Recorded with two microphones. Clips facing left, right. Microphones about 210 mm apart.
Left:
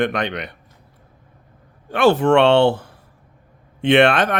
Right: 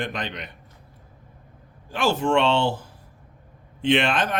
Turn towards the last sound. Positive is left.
turn(degrees=65)  # may be behind; listen again after turning